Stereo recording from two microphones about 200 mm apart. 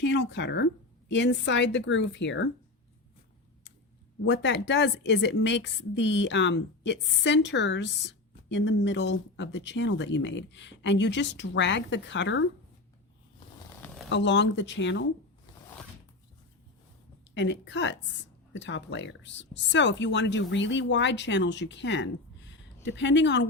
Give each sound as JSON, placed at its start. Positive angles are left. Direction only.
{"t": 0.0, "sound": "a woman's voice", "side_deg": 60}
{"t": 4.3, "sound": "a woman's voice", "side_deg": 60}
{"t": 14.1, "sound": "a woman's voice", "side_deg": 65}
{"t": 15.5, "sound": "zipper", "side_deg": 20}
{"t": 17.3, "sound": "a woman's voice", "side_deg": 60}